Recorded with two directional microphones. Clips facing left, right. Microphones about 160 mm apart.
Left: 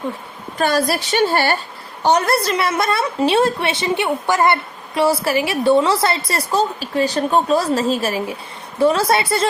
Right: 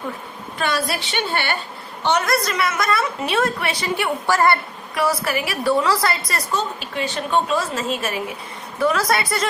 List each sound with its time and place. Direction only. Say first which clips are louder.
0.6 s a woman's voice: left 5 dB; 40° left (ahead or behind)